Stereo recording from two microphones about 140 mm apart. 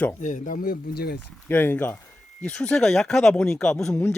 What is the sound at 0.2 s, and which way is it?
Speech, 65° left (ahead or behind).